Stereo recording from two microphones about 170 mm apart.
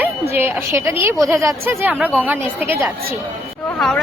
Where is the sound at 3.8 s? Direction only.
Centre (ahead or behind).